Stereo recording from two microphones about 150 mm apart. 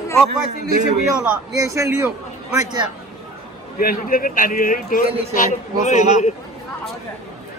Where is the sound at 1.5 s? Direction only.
20° right (ahead or behind).